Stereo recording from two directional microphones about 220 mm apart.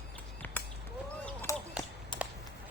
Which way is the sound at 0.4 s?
10° left (ahead or behind).